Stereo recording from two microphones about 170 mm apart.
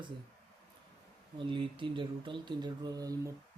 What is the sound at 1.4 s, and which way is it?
Speech, 30° right (ahead or behind).